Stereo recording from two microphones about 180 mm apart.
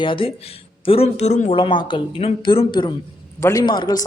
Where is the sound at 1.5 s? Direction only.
25° left (ahead or behind).